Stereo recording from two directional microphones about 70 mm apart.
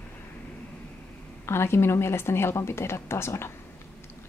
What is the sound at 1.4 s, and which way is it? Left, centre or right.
Speech, left.